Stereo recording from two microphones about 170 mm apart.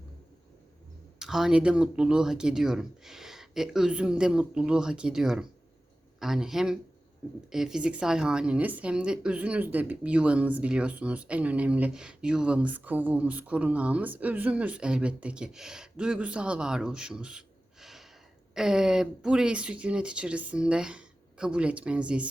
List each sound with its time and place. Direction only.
1.2 s a woman's voice: 5° right (ahead or behind)